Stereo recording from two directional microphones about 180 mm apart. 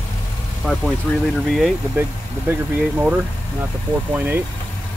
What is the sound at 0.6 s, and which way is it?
Speech, centre (ahead or behind).